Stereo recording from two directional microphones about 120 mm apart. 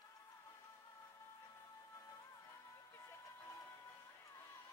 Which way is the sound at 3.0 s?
25° left (ahead or behind).